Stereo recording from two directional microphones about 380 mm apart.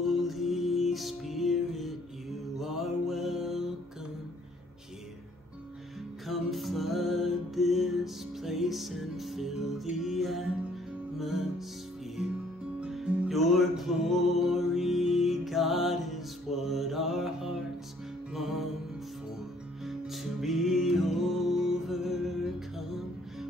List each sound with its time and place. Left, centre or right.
0.0 s music: centre
2.6 s mantra: centre
6.2 s music: centre
19.8 s music: centre